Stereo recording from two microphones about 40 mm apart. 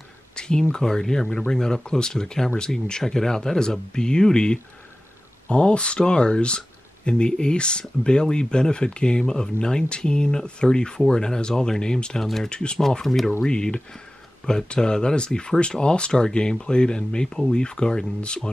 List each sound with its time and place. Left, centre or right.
0.4 s speech: left
12.2 s speech: centre
12.4 s speech: left
13.0 s speech: centre
13.5 s speech: left